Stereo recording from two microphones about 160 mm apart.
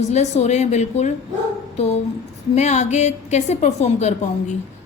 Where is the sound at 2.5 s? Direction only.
45° left (ahead or behind).